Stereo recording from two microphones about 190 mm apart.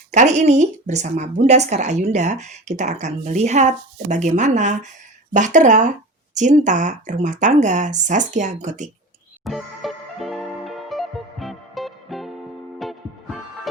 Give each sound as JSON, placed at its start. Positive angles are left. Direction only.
{"t": 0.1, "sound": "a woman's voice", "side_deg": -40}
{"t": 9.4, "sound": "music", "side_deg": 0}